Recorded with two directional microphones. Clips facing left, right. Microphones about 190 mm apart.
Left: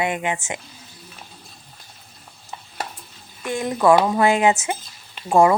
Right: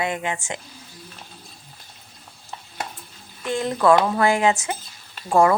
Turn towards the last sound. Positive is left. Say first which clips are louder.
# left 2 dB
turn(degrees=15)  # may be behind; listen again after turning